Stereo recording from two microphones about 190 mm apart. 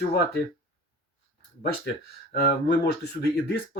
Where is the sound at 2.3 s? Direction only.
60° left (ahead or behind).